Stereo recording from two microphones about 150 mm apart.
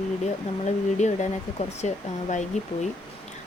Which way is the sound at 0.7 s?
50° left (ahead or behind).